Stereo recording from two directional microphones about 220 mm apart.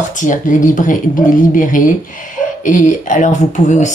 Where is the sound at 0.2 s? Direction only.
35° left (ahead or behind).